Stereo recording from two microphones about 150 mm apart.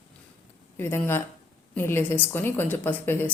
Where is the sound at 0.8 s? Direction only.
15° left (ahead or behind).